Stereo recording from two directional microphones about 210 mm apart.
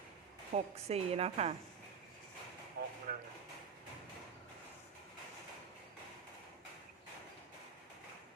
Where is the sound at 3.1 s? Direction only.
45° right (ahead or behind).